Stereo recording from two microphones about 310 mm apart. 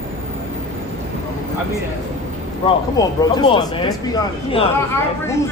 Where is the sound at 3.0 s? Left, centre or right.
Centre.